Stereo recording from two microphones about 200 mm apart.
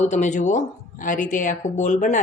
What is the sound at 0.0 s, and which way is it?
Speech, 35° left (ahead or behind).